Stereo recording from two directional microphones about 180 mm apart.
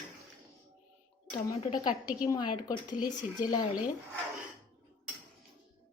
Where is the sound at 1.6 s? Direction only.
25° left (ahead or behind).